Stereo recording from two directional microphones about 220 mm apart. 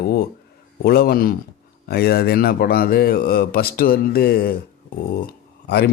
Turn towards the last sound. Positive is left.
turn(degrees=45)  # may be behind; listen again after turning